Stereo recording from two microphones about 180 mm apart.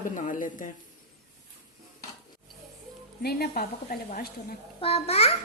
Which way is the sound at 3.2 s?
60° left (ahead or behind).